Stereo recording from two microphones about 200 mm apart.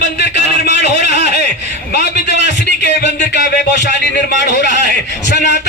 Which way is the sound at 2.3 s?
60° left (ahead or behind).